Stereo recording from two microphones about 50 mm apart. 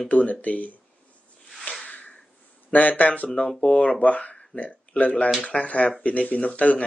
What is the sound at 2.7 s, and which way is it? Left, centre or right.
Speech, left.